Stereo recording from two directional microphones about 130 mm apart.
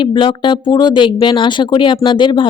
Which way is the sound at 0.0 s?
40° left (ahead or behind).